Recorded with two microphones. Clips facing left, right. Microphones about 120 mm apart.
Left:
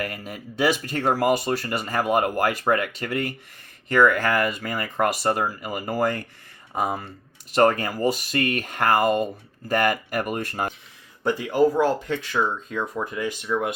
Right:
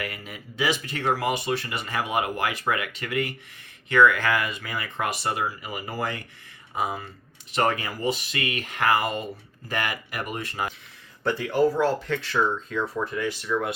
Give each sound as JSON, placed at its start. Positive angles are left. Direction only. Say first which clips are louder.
{"t": 0.0, "sound": "speech", "louder": "left 4 dB", "side_deg": 40}
{"t": 11.2, "sound": "speech", "louder": "left 2 dB", "side_deg": 15}